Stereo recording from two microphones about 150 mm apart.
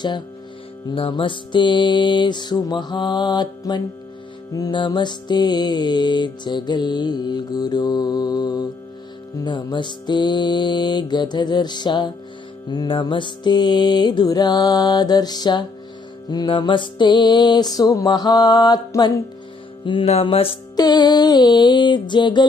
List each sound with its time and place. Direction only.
0.9 s music: 35° left (ahead or behind)
20.7 s music: 25° left (ahead or behind)